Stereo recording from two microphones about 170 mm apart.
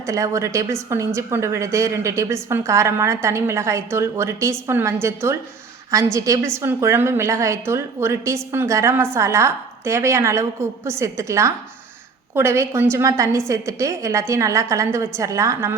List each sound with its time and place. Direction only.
0.0 s a woman's voice: 20° right (ahead or behind)